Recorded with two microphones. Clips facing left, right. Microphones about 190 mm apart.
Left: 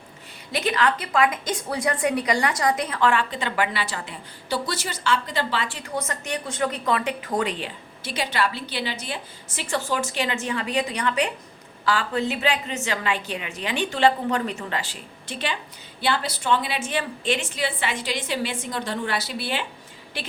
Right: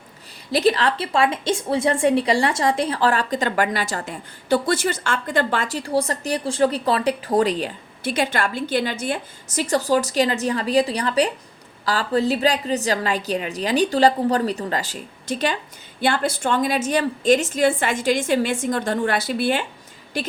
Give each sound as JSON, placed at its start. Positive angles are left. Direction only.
{"t": 0.5, "sound": "a woman's voice", "side_deg": -35}
{"t": 8.0, "sound": "a woman's voice", "side_deg": -50}